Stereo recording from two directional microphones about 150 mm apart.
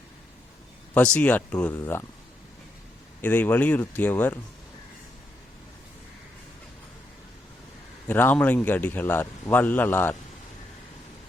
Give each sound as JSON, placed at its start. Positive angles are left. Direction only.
{"t": 0.9, "sound": "a man's voice", "side_deg": 10}
{"t": 3.2, "sound": "a man's voice", "side_deg": 10}
{"t": 8.0, "sound": "a man's voice", "side_deg": 10}